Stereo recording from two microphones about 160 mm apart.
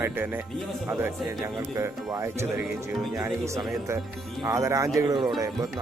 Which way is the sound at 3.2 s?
15° right (ahead or behind).